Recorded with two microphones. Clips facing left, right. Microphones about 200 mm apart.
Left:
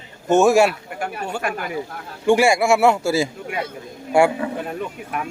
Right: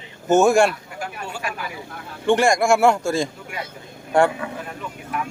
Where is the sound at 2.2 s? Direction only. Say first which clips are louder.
Left 1 dB; 10° left (ahead or behind).